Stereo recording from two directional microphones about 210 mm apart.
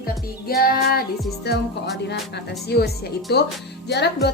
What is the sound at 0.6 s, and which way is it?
Speech, 45° left (ahead or behind).